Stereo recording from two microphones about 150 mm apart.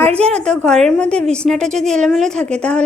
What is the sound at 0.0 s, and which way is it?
A woman's voice, 10° left (ahead or behind).